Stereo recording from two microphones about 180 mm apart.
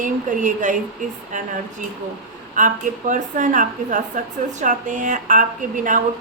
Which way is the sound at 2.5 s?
45° right (ahead or behind).